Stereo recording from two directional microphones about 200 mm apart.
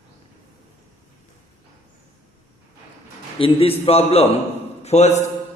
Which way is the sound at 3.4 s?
25° left (ahead or behind).